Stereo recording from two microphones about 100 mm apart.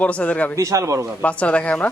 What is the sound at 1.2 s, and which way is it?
Speech, 15° left (ahead or behind).